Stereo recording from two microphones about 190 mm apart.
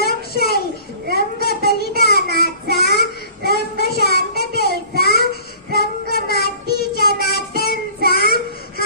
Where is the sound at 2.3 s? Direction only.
55° left (ahead or behind).